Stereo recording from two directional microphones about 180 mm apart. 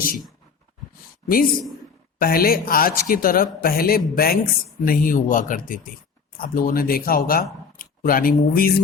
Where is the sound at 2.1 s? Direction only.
55° left (ahead or behind).